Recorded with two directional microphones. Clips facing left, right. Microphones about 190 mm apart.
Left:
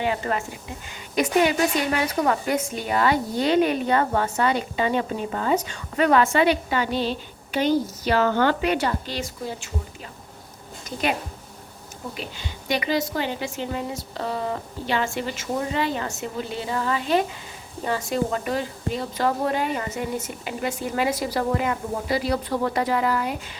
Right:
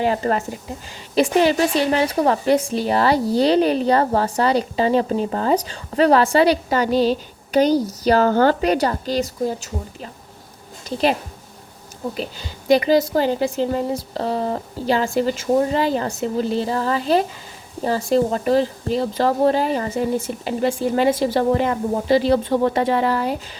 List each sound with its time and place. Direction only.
0.0 s a woman's voice: 40° right (ahead or behind)
12.1 s a woman's voice: 40° right (ahead or behind)